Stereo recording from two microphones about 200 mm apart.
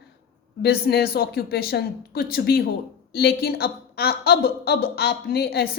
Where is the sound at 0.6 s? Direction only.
50° left (ahead or behind).